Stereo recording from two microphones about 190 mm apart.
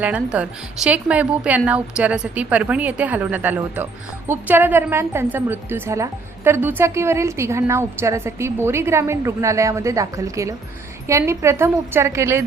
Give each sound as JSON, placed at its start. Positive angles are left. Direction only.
{"t": 0.0, "sound": "a woman's voice", "side_deg": -5}